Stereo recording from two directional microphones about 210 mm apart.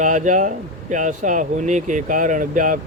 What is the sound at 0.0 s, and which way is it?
Speech, 35° right (ahead or behind).